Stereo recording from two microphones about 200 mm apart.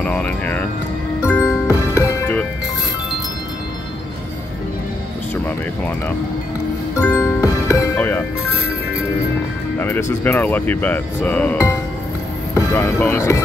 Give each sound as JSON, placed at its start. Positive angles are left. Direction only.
{"t": 0.0, "sound": "speech", "side_deg": 5}
{"t": 1.2, "sound": "music", "side_deg": 10}
{"t": 5.3, "sound": "speech", "side_deg": 10}
{"t": 7.0, "sound": "music", "side_deg": 10}
{"t": 9.8, "sound": "speech", "side_deg": 10}